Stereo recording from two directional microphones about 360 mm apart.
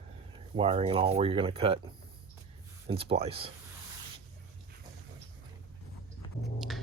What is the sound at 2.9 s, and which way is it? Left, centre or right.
Speech, centre.